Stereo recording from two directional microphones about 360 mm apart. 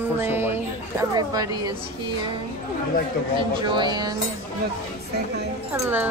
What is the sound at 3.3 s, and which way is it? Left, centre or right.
Speech, centre.